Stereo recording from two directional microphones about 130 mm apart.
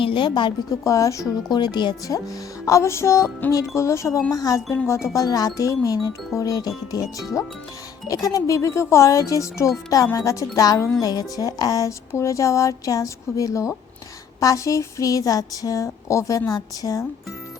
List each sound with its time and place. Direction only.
0.0 s a woman's voice: 40° left (ahead or behind)